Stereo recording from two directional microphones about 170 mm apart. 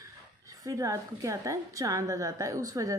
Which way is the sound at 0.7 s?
20° right (ahead or behind).